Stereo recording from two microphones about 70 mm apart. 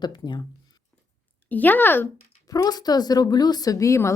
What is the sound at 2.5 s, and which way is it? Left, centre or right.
Speech, left.